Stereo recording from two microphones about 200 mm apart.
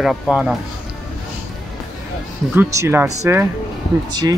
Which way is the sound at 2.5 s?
10° right (ahead or behind).